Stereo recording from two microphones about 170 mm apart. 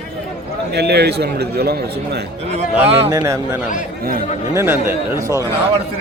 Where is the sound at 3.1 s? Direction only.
20° right (ahead or behind).